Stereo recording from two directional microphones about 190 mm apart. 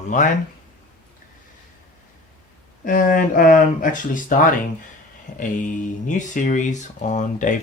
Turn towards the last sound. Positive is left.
turn(degrees=40)  # may be behind; listen again after turning